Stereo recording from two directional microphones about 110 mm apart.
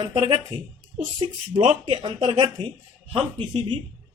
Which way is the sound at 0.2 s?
50° right (ahead or behind).